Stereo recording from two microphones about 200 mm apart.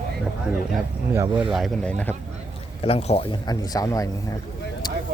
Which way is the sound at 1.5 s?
Centre (ahead or behind).